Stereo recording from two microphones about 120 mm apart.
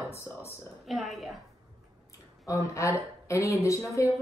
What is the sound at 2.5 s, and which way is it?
Speech, 25° left (ahead or behind).